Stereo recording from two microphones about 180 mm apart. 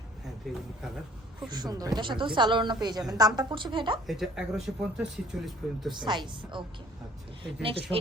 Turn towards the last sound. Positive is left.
turn(degrees=-30)  # may be behind; listen again after turning